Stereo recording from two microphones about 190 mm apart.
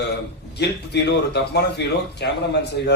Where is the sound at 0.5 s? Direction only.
60° left (ahead or behind).